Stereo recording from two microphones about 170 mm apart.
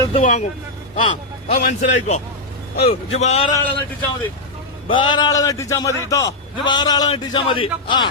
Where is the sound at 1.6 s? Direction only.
50° left (ahead or behind).